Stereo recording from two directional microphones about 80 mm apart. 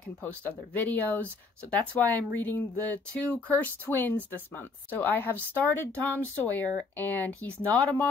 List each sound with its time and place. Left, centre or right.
0.7 s speech: left